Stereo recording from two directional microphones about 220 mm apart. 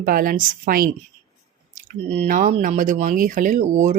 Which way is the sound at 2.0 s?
30° right (ahead or behind).